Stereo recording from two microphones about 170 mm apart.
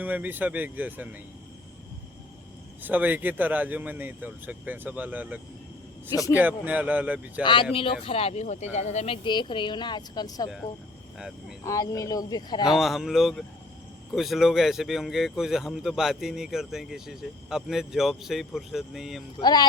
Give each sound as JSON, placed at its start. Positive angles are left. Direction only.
{"t": 0.0, "sound": "speech", "side_deg": -10}
{"t": 2.8, "sound": "speech", "side_deg": -10}
{"t": 6.1, "sound": "a woman's voice", "side_deg": 20}
{"t": 6.3, "sound": "speech", "side_deg": -10}
{"t": 7.4, "sound": "speech", "side_deg": 30}
{"t": 9.2, "sound": "a woman's voice", "side_deg": 25}
{"t": 11.6, "sound": "a woman's voice", "side_deg": 20}
{"t": 12.6, "sound": "speech", "side_deg": 0}
{"t": 19.4, "sound": "a woman's voice", "side_deg": 25}